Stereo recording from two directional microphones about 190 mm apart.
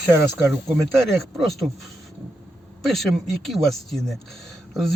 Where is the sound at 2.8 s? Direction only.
Centre (ahead or behind).